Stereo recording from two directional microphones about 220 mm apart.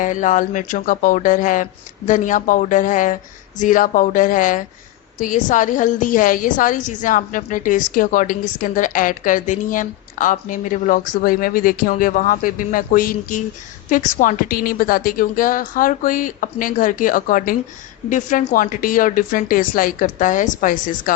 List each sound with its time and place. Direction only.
0.0 s a woman's voice: 35° left (ahead or behind)